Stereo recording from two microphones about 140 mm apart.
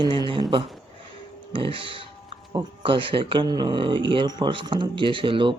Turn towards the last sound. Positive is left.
turn(degrees=-35)  # may be behind; listen again after turning